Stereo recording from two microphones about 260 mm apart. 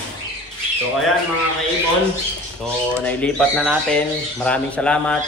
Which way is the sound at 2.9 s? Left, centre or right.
Centre.